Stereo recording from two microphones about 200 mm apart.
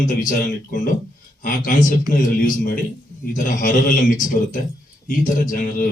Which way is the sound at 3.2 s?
40° left (ahead or behind).